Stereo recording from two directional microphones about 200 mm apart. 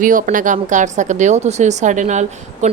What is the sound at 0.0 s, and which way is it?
A woman's voice, 40° right (ahead or behind).